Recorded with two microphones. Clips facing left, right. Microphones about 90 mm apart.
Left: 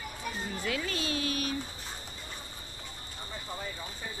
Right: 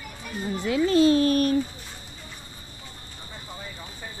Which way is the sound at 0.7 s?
25° right (ahead or behind).